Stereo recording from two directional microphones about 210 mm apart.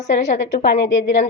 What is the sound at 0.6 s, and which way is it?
Speech, 55° left (ahead or behind).